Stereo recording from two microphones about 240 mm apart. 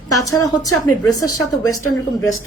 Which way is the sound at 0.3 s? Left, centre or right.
Centre.